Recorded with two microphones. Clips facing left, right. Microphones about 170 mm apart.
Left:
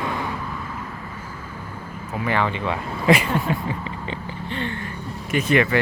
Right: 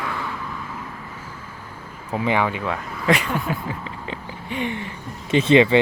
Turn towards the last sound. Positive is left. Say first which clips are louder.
# right 5 dB
turn(degrees=-20)  # may be behind; listen again after turning